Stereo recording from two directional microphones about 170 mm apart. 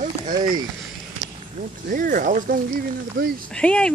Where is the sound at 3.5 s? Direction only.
5° left (ahead or behind).